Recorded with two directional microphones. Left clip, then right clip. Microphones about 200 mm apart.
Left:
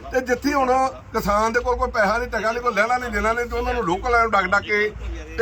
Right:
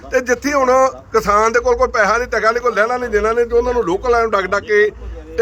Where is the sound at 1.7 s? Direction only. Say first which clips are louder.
Right 6 dB; 35° right (ahead or behind).